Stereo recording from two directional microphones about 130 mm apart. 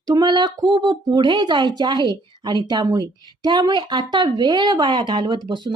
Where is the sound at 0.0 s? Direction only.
30° right (ahead or behind).